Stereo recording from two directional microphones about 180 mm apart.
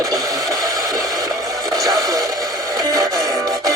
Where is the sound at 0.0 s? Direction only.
20° right (ahead or behind).